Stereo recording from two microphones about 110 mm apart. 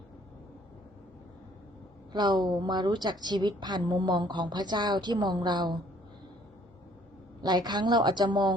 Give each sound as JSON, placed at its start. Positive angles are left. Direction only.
{"t": 2.1, "sound": "a woman's voice", "side_deg": -40}
{"t": 7.4, "sound": "a woman's voice", "side_deg": -40}